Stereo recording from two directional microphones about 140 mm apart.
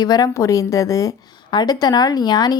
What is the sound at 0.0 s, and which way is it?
Speech, 30° left (ahead or behind).